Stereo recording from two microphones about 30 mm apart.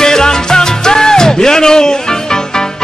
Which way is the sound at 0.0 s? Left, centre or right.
Left.